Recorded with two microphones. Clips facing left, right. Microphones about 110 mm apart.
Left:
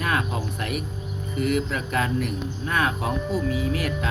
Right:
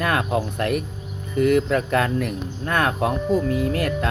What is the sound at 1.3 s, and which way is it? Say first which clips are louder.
Speech: right 7 dB; 45° right (ahead or behind).